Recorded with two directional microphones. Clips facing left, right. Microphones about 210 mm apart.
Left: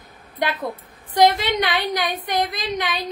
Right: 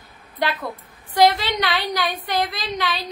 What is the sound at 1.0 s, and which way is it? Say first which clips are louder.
Speech: even; 20° left (ahead or behind).